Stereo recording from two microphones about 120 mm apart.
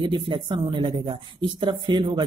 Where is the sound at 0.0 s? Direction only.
40° right (ahead or behind).